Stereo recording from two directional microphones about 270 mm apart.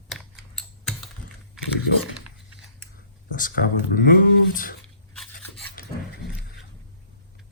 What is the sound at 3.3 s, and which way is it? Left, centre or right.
Speech, left.